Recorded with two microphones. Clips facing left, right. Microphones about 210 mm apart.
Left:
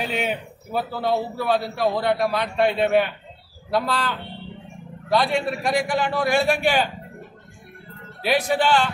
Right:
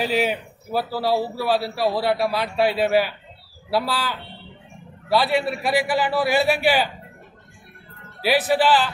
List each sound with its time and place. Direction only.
0.0 s a man's voice: 5° right (ahead or behind)
8.2 s a man's voice: 5° right (ahead or behind)